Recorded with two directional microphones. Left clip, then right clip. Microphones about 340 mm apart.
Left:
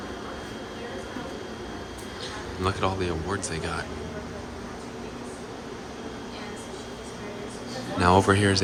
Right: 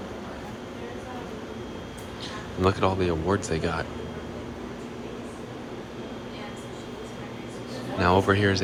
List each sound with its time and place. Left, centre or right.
2.6 s speech: centre
7.9 s speech: centre